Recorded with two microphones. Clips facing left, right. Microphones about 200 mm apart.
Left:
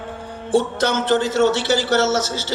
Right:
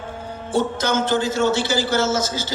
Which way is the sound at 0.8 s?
65° left (ahead or behind).